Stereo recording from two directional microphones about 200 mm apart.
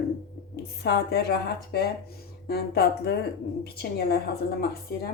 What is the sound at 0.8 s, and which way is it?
A woman's voice, 55° left (ahead or behind).